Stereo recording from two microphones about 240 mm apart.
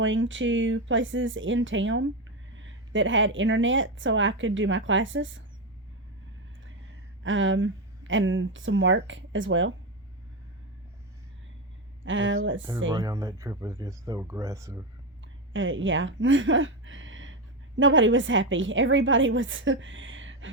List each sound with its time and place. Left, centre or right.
0.0 s a woman's voice: right
7.2 s a woman's voice: right
12.0 s a woman's voice: right
12.9 s speech: centre
15.2 s a woman's voice: right